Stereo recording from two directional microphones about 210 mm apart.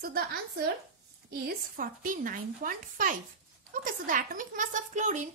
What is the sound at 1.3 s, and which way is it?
A woman's voice, 40° right (ahead or behind).